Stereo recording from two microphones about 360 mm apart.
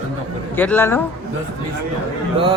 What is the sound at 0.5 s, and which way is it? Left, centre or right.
Speech, centre.